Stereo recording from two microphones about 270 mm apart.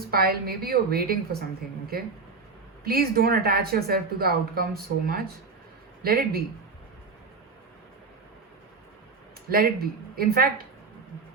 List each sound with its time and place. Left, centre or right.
0.1 s a woman's voice: right
2.8 s a woman's voice: right
9.5 s a woman's voice: right